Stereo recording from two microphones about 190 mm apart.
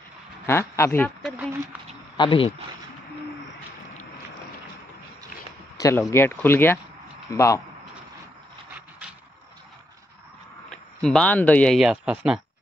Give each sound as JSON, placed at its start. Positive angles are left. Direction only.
{"t": 0.5, "sound": "speech", "side_deg": 15}
{"t": 1.2, "sound": "speech", "side_deg": -10}
{"t": 2.1, "sound": "speech", "side_deg": 25}
{"t": 5.8, "sound": "speech", "side_deg": 15}
{"t": 10.7, "sound": "speech", "side_deg": 5}